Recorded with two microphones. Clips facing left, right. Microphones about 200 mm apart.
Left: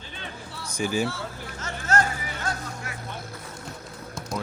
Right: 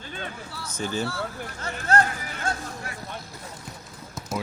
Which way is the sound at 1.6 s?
35° right (ahead or behind).